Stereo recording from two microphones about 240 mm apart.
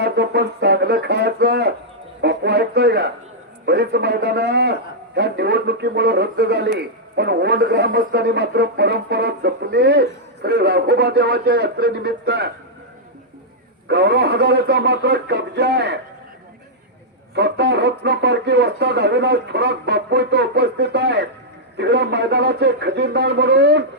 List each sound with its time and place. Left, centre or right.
0.0 s a sound: right
3.7 s a man's voice: right
13.8 s a man's voice: right
17.3 s a man's voice: right